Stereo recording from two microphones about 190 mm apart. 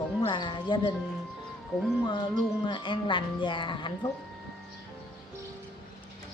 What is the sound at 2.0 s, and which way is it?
Speech, 25° left (ahead or behind).